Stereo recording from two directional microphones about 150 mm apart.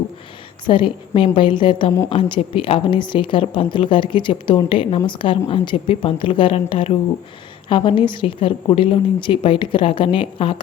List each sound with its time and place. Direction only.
0.6 s a woman's voice: 35° left (ahead or behind)